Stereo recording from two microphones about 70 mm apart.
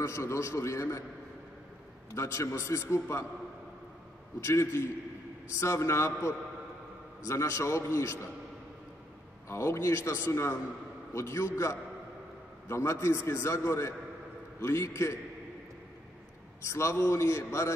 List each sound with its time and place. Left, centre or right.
0.0 s a man's voice: left
2.1 s a man's voice: left
4.4 s a man's voice: left
9.5 s a man's voice: left
16.6 s a man's voice: left